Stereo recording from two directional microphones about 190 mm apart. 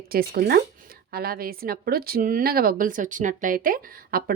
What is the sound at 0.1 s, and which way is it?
Speech, 50° right (ahead or behind).